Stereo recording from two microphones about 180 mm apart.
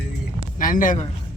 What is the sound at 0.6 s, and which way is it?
Speech, 50° left (ahead or behind).